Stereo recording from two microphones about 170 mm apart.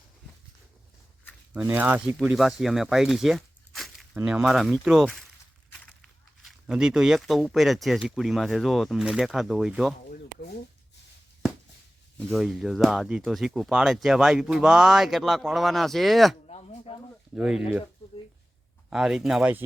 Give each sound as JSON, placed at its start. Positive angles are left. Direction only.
{"t": 1.5, "sound": "speech", "side_deg": -10}
{"t": 10.1, "sound": "a sound", "side_deg": 65}
{"t": 12.3, "sound": "speech", "side_deg": 0}
{"t": 16.5, "sound": "a sound", "side_deg": 35}
{"t": 17.3, "sound": "speech", "side_deg": -5}
{"t": 18.9, "sound": "speech", "side_deg": -5}